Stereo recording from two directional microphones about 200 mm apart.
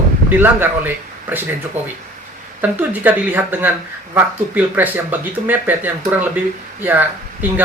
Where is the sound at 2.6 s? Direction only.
10° right (ahead or behind).